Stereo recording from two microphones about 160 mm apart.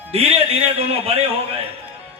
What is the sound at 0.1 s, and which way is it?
A man's voice, 40° right (ahead or behind).